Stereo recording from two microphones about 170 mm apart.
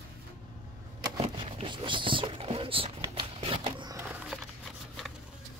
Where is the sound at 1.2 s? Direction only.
30° right (ahead or behind).